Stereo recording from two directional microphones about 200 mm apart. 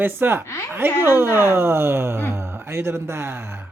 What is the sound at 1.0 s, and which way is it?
Speech, 10° right (ahead or behind).